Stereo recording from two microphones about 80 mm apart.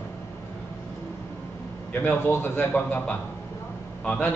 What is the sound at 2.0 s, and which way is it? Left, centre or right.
A man's voice, left.